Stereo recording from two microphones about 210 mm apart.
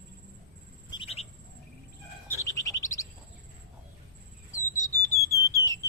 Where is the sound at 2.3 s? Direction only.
15° left (ahead or behind).